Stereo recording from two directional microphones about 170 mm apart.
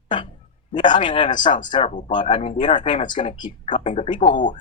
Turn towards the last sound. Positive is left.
turn(degrees=50)  # may be behind; listen again after turning